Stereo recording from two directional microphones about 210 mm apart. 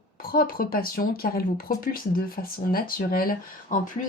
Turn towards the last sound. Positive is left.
turn(degrees=45)  # may be behind; listen again after turning